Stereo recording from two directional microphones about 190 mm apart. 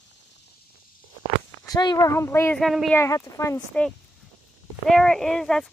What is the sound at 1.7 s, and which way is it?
Speech, 20° left (ahead or behind).